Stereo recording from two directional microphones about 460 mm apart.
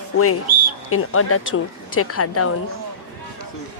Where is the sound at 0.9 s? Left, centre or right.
Left.